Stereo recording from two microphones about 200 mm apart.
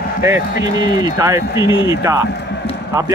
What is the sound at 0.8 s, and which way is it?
A man's voice, 15° right (ahead or behind).